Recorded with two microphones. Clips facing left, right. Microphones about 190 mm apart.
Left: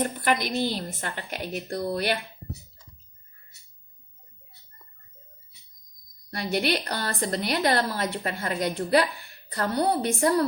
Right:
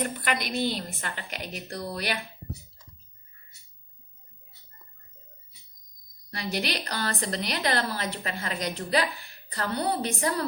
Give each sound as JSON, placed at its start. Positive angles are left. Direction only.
{"t": 0.0, "sound": "a woman's voice", "side_deg": 45}
{"t": 6.3, "sound": "a woman's voice", "side_deg": 50}